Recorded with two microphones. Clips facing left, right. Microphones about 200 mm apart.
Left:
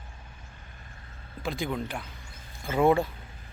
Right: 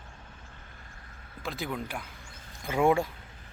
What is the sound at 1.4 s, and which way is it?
A man's voice, centre (ahead or behind).